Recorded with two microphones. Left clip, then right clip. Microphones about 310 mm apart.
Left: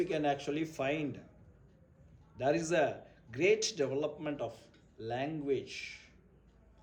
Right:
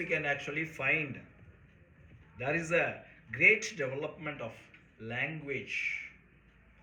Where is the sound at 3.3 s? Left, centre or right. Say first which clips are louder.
Right 4 dB; centre.